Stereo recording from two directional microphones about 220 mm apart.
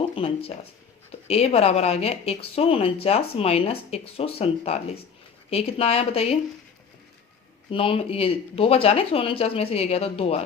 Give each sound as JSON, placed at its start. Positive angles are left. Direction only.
{"t": 0.2, "sound": "speech", "side_deg": 25}
{"t": 7.7, "sound": "speech", "side_deg": 25}